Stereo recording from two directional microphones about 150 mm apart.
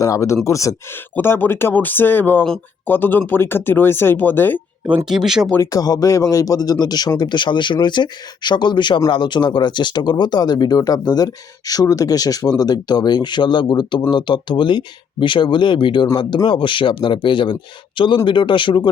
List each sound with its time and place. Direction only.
0.0 s speech: 20° left (ahead or behind)
4.9 s speech: 5° right (ahead or behind)
5.5 s speech: 20° left (ahead or behind)